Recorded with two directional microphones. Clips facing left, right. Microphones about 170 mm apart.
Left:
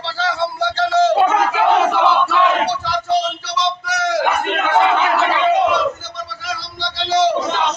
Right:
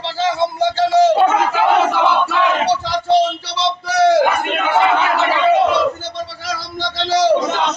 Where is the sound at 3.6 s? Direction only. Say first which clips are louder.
Right 5 dB; 35° right (ahead or behind).